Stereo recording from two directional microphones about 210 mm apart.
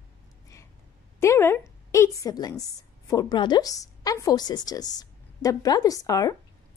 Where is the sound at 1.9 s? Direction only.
15° left (ahead or behind).